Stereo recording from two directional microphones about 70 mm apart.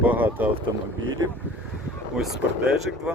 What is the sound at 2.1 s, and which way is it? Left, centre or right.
Speech, centre.